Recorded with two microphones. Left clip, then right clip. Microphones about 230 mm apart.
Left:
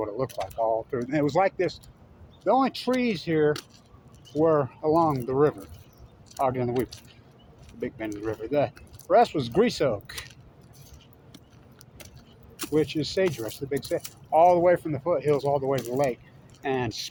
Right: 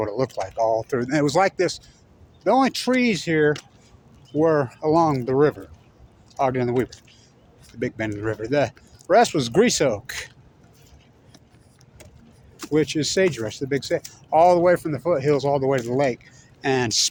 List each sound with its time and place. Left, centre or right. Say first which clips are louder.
0.0 s speech: right 5 dB; right
12.7 s speech: right 4 dB; right